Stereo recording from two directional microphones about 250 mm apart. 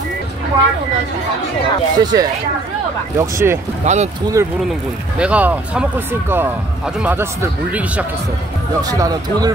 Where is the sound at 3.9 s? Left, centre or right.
Right.